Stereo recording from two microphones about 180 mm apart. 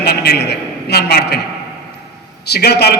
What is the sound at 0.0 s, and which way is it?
A man's voice, 60° left (ahead or behind).